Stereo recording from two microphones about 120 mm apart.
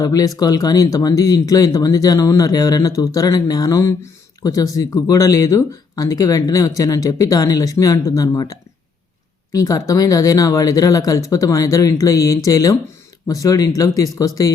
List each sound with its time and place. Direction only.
0.0 s speech: 30° left (ahead or behind)